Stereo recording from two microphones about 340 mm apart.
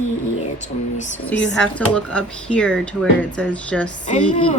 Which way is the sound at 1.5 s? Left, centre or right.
Centre.